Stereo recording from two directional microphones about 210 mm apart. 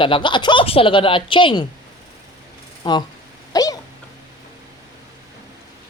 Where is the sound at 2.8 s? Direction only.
20° left (ahead or behind).